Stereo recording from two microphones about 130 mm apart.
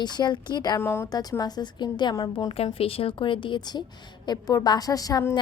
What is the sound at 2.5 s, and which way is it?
A woman's voice, 45° left (ahead or behind).